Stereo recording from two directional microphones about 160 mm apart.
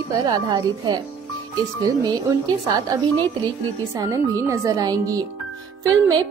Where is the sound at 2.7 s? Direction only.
25° right (ahead or behind).